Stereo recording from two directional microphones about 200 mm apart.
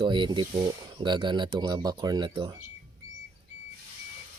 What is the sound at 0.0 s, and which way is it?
Speech, 25° right (ahead or behind).